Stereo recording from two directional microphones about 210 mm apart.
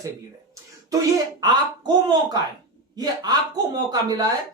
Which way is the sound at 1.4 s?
20° right (ahead or behind).